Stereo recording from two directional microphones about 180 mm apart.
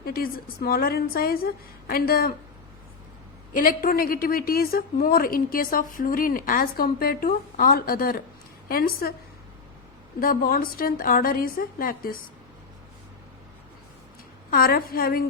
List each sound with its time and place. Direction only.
0.0 s a woman's voice: 55° left (ahead or behind)
3.5 s a woman's voice: 50° left (ahead or behind)
10.2 s a woman's voice: 55° left (ahead or behind)
14.5 s a woman's voice: 55° left (ahead or behind)